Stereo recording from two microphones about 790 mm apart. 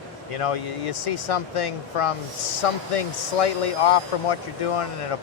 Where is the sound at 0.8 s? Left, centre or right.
Left.